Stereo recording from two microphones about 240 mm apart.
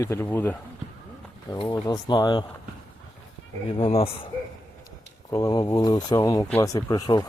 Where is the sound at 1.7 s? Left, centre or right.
Centre.